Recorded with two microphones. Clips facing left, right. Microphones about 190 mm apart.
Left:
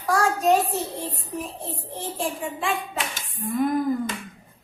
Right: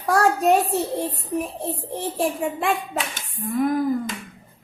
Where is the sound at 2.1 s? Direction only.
60° right (ahead or behind).